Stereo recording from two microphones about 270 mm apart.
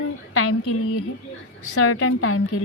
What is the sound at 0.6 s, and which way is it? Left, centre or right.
Speech, left.